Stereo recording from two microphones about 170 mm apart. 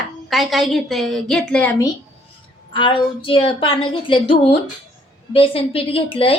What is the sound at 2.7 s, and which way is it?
A woman's voice, 30° left (ahead or behind).